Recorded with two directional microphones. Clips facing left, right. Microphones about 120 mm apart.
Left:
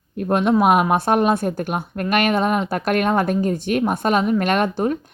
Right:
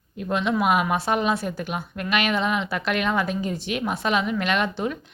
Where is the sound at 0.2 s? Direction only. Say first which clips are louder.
Left 6 dB; 50° left (ahead or behind).